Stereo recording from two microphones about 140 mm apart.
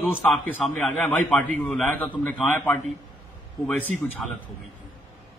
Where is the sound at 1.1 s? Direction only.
10° left (ahead or behind).